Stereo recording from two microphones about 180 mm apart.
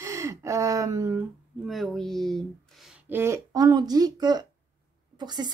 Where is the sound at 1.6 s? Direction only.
Centre (ahead or behind).